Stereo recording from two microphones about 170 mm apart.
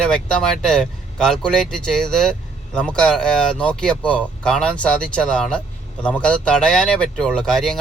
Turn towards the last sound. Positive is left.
turn(degrees=5)  # may be behind; listen again after turning